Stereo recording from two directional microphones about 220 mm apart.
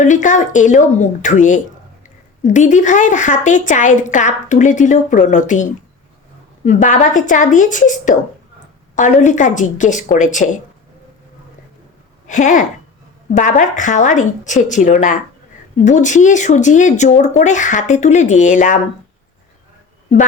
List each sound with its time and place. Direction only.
0.0 s a woman's voice: 35° left (ahead or behind)
6.7 s a woman's voice: 35° left (ahead or behind)
12.3 s a woman's voice: 35° left (ahead or behind)